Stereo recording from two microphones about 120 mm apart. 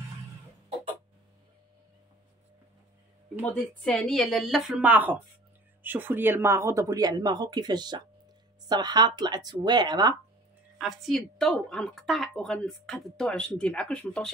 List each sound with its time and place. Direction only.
3.8 s a woman's voice: 5° left (ahead or behind); by 10.1 s 35° right (ahead or behind)
10.8 s a woman's voice: centre (ahead or behind)